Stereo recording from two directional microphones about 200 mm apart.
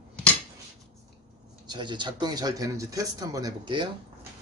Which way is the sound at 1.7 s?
25° right (ahead or behind).